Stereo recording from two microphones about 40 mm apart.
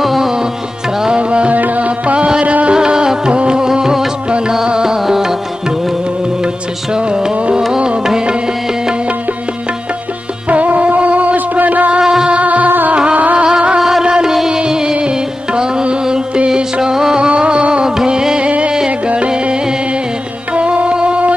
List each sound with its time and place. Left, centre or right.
0.0 s music: centre
1.0 s music: right
1.5 s music: right; by 5.3 s centre
6.4 s music: right
10.5 s music: right
12.0 s music: centre
12.3 s music: right
12.9 s music: right
13.4 s music: right
13.7 s music: centre
14.3 s music: centre
17.3 s music: right